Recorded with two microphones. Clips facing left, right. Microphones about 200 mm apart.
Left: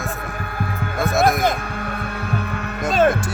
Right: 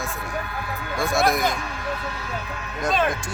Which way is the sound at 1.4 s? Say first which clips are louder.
Left 4 dB; 55° left (ahead or behind).